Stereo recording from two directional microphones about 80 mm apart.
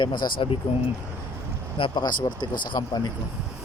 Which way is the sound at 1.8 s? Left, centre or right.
Left.